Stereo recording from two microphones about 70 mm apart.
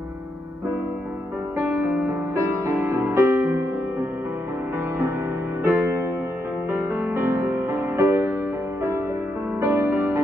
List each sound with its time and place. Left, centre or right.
1.6 s music: right
5.6 s music: right
9.6 s music: right